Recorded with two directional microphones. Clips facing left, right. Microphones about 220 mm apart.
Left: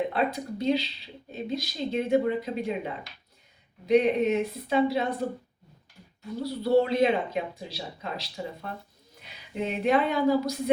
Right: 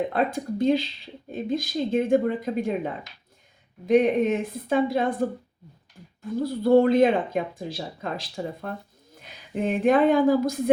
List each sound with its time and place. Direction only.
0.1 s speech: 50° right (ahead or behind)
6.2 s speech: 50° right (ahead or behind)